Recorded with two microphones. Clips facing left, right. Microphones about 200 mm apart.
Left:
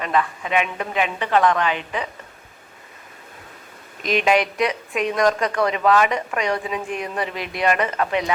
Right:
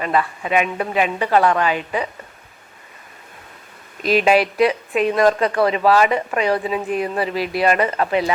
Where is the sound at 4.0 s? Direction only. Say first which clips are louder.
Right 3 dB; 35° right (ahead or behind).